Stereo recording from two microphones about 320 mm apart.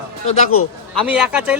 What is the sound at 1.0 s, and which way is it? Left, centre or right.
Speech, centre.